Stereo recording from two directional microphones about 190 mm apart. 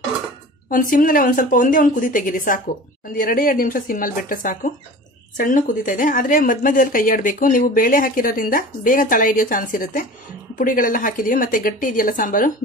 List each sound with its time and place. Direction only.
0.7 s speech: 45° left (ahead or behind)